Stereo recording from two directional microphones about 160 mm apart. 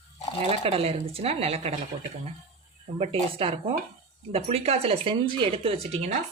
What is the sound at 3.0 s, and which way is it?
Speech, 35° right (ahead or behind).